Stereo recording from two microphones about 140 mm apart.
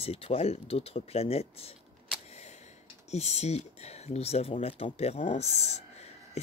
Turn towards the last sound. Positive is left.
turn(degrees=50)  # may be behind; listen again after turning